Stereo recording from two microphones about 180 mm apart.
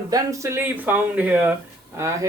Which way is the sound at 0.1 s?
15° right (ahead or behind).